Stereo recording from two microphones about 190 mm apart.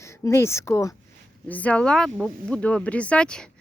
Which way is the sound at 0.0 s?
15° left (ahead or behind).